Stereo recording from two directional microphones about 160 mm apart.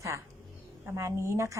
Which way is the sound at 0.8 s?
15° right (ahead or behind).